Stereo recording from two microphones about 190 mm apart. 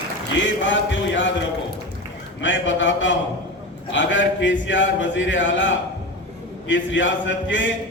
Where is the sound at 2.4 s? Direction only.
75° left (ahead or behind).